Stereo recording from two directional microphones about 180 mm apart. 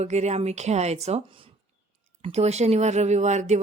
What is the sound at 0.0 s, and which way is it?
Speech, 40° right (ahead or behind).